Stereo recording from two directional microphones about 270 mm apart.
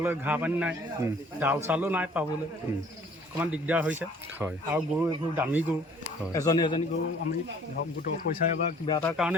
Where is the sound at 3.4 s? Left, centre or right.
Centre.